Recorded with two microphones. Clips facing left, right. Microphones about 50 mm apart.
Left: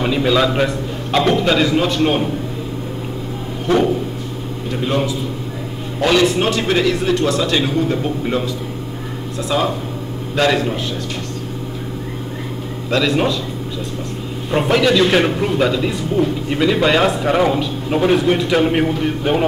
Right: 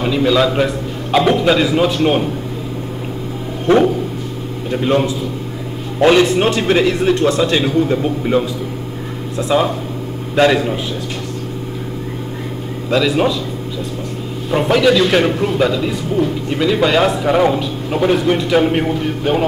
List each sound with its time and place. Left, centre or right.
0.0 s a man's voice: centre
4.7 s a man's voice: centre
7.5 s a man's voice: centre
9.4 s speech: centre
12.9 s a man's voice: centre
14.5 s a man's voice: centre